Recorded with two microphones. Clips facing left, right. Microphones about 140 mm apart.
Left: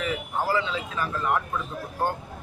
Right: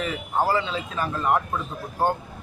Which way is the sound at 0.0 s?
30° right (ahead or behind).